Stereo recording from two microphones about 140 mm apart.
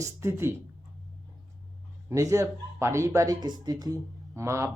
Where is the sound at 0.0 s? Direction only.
20° right (ahead or behind).